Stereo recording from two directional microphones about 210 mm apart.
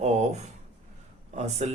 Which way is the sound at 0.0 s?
30° right (ahead or behind).